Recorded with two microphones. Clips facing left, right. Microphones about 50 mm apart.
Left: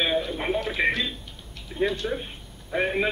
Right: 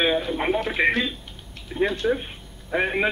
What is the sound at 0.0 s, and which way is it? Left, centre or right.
A man's voice, centre.